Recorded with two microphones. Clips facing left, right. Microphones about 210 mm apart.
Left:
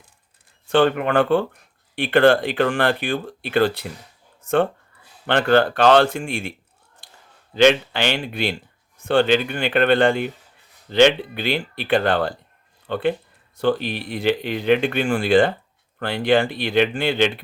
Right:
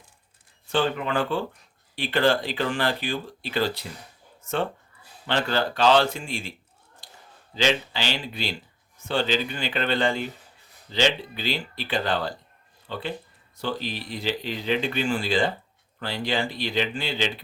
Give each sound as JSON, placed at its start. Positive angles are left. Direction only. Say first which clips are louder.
{"t": 0.7, "sound": "speech", "louder": "left 7 dB", "side_deg": 60}
{"t": 5.2, "sound": "speech", "louder": "left 8 dB", "side_deg": 60}
{"t": 7.5, "sound": "speech", "louder": "left 9 dB", "side_deg": 60}